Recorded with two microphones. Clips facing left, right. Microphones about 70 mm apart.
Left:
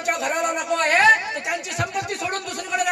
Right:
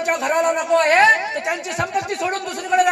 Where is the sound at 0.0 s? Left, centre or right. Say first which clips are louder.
Right 5 dB; right.